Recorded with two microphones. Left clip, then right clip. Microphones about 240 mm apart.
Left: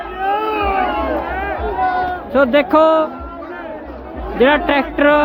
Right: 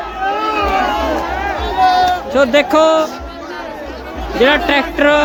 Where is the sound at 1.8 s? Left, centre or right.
Right.